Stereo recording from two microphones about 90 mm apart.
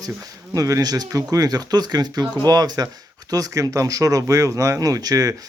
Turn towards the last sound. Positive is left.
turn(degrees=-40)  # may be behind; listen again after turning